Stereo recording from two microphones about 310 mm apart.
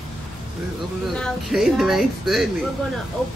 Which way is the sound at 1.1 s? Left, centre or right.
Centre.